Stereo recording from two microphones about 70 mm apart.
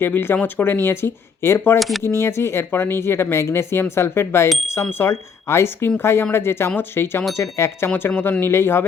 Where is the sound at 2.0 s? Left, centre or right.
Left.